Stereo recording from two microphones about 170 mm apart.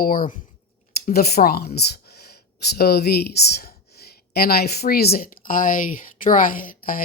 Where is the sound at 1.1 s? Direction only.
65° left (ahead or behind).